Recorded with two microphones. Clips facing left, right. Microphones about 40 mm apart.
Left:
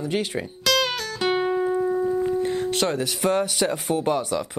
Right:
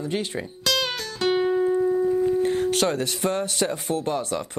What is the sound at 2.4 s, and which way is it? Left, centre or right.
Music, right.